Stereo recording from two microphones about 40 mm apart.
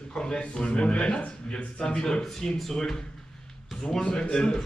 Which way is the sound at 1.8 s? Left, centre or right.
Centre.